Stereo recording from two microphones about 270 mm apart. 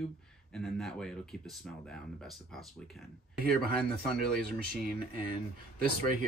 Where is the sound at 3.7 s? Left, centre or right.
Right.